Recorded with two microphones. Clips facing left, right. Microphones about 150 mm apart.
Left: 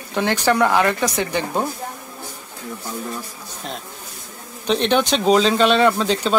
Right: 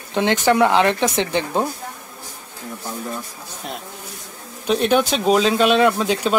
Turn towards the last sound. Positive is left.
turn(degrees=-5)  # may be behind; listen again after turning